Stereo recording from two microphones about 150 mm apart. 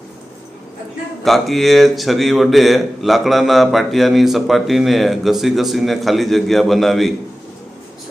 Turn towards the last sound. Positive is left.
turn(degrees=0)  # may be behind; listen again after turning